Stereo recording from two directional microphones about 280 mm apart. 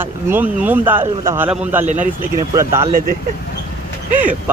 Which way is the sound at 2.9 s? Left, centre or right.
Right.